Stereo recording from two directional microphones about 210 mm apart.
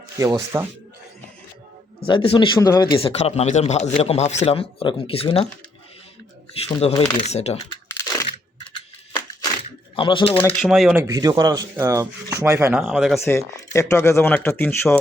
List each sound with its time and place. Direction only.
0.2 s speech: 15° right (ahead or behind)
2.0 s speech: 25° left (ahead or behind)
6.6 s speech: 30° left (ahead or behind)
7.9 s crunch: 15° left (ahead or behind)
9.6 s a sound: 25° left (ahead or behind)
10.6 s speech: centre (ahead or behind)
11.0 s speech: 15° right (ahead or behind)
12.8 s speech: centre (ahead or behind)
13.1 s speech: 10° left (ahead or behind)